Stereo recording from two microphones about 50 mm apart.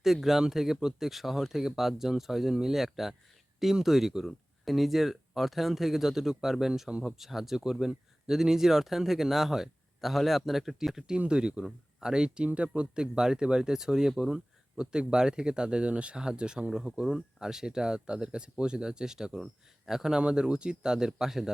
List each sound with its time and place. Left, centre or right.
0.0 s speech: centre
16.7 s speech: centre